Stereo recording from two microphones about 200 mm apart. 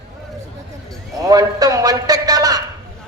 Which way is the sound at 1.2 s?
20° right (ahead or behind).